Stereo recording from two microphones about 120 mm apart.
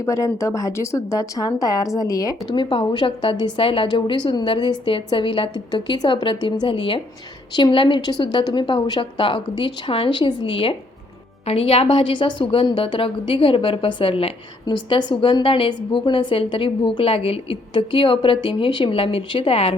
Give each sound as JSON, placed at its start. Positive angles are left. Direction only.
{"t": 0.0, "sound": "speech", "side_deg": 25}
{"t": 2.5, "sound": "a woman's voice", "side_deg": 45}
{"t": 14.7, "sound": "a woman's voice", "side_deg": 40}